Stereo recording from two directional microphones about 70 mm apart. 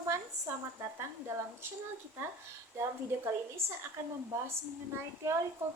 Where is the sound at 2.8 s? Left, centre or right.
Right.